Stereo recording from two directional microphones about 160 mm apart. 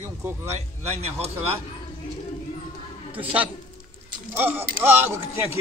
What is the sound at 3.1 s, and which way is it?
Speech, 10° right (ahead or behind).